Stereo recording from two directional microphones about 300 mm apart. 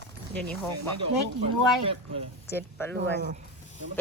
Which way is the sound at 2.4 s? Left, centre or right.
Centre.